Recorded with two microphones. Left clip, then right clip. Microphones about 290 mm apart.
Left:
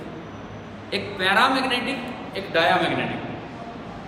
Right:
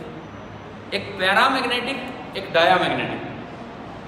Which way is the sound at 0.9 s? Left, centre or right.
Centre.